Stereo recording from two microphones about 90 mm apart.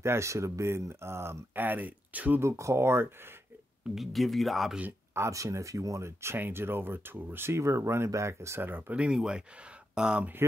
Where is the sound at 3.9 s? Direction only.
Centre (ahead or behind).